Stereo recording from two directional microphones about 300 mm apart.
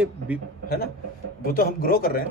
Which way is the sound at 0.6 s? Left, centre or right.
Left.